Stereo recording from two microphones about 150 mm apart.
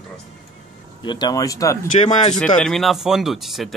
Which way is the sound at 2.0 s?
50° left (ahead or behind).